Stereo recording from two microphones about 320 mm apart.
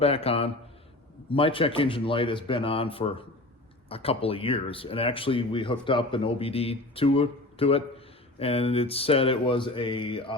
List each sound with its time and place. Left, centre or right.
0.0 s speech: centre